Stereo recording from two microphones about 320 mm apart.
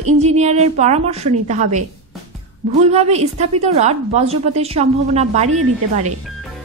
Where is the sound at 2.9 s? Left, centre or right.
Centre.